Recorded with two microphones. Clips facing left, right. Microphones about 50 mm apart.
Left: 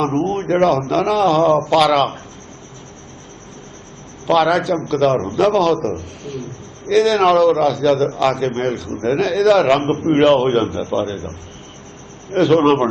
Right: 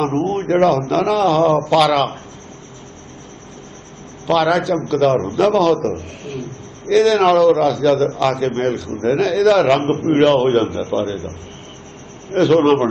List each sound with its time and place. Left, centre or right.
0.0 s a man's voice: centre
4.3 s a man's voice: centre
12.3 s a man's voice: centre